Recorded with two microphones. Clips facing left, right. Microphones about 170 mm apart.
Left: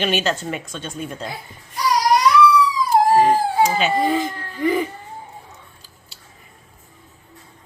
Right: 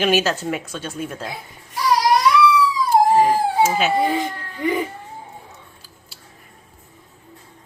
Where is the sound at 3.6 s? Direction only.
Centre (ahead or behind).